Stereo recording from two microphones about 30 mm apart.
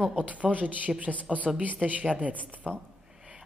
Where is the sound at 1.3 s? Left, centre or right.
Centre.